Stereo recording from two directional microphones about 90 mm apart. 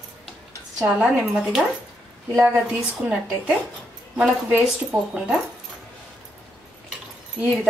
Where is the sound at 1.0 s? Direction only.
5° right (ahead or behind).